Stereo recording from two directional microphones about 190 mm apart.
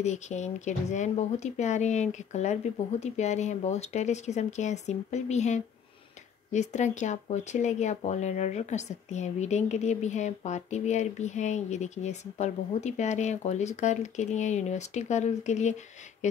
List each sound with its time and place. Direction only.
0.0 s speech: 35° left (ahead or behind)